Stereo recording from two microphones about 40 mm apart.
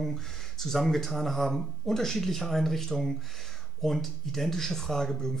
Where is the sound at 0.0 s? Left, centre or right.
Centre.